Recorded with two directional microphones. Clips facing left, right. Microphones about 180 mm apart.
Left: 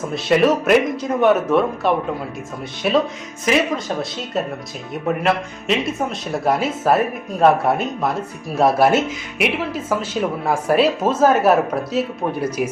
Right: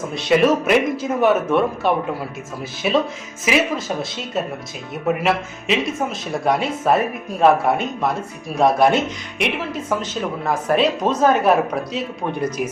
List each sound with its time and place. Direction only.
0.1 s speech: centre (ahead or behind)
5.0 s speech: centre (ahead or behind)